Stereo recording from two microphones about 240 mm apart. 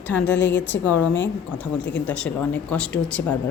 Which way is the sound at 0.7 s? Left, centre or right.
Centre.